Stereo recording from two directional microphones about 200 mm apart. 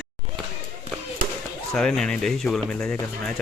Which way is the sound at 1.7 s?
5° left (ahead or behind).